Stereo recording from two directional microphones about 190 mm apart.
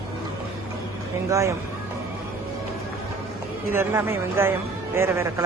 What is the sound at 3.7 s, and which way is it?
Speech, 15° right (ahead or behind).